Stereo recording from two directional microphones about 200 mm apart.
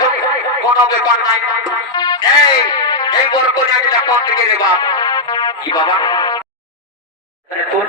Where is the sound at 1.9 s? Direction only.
20° left (ahead or behind).